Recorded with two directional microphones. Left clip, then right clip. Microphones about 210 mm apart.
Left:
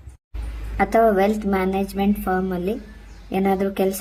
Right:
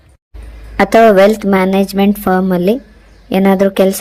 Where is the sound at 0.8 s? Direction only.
40° right (ahead or behind).